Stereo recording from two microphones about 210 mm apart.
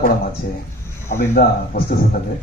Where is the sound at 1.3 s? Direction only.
45° left (ahead or behind).